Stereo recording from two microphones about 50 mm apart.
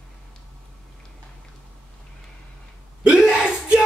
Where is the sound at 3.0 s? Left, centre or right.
Centre.